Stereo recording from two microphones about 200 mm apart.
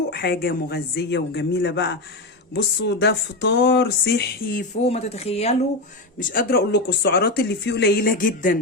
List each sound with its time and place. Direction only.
0.1 s speech: 55° left (ahead or behind)
4.8 s speech: 30° left (ahead or behind)
6.1 s speech: 50° left (ahead or behind)